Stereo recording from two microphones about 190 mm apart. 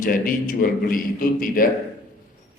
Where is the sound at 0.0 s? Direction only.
45° left (ahead or behind).